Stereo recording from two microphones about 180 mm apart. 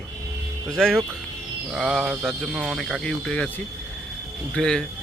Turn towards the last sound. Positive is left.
turn(degrees=5)  # may be behind; listen again after turning